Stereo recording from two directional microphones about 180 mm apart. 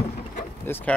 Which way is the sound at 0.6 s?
10° left (ahead or behind).